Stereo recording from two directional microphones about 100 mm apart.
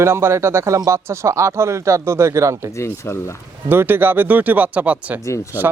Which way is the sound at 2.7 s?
30° left (ahead or behind).